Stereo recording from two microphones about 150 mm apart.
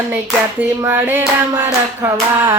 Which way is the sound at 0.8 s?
15° right (ahead or behind).